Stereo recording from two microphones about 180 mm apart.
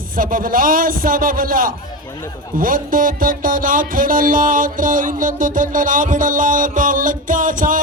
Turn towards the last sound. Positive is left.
turn(degrees=-50)  # may be behind; listen again after turning